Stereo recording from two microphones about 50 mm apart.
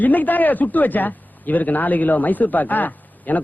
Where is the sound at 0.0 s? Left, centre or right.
Left.